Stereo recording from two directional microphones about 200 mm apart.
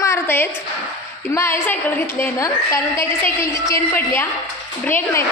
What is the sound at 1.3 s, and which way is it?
A woman's voice, 15° left (ahead or behind).